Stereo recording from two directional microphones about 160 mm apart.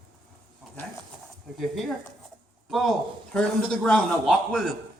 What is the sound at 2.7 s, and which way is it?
A man's voice, centre (ahead or behind).